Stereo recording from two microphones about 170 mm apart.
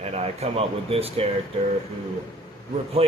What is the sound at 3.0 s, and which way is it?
Speech, 35° right (ahead or behind).